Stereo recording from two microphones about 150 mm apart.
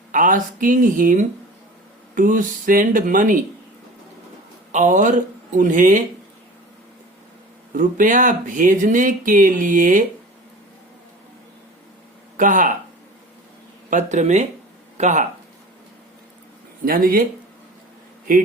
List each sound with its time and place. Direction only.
0.1 s speech: 60° right (ahead or behind)
4.7 s speech: 55° right (ahead or behind)
7.7 s speech: 60° right (ahead or behind)
12.4 s speech: 60° right (ahead or behind)
13.9 s speech: 50° right (ahead or behind)
16.8 s speech: 70° right (ahead or behind)